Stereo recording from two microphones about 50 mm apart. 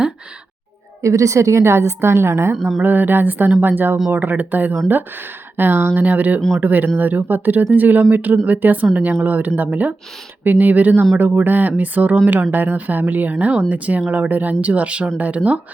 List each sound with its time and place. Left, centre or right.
1.0 s a woman's voice: right
2.6 s a sound: centre
2.8 s speech: right
6.0 s speech: right